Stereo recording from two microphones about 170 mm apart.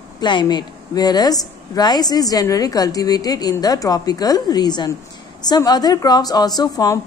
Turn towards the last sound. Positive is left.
turn(degrees=20)  # may be behind; listen again after turning